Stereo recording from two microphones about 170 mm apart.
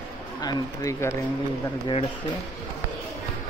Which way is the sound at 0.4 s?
20° left (ahead or behind).